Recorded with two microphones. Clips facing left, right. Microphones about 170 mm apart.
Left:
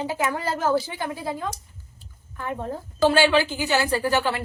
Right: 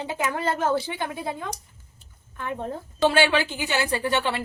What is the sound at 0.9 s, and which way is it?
Speech, 20° right (ahead or behind).